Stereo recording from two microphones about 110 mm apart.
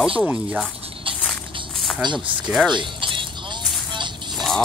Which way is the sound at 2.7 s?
50° right (ahead or behind).